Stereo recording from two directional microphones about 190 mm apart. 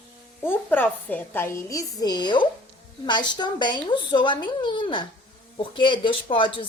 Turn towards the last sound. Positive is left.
turn(degrees=25)  # may be behind; listen again after turning